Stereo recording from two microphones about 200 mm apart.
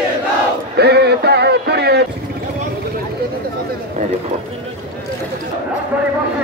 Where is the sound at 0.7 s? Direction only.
55° right (ahead or behind).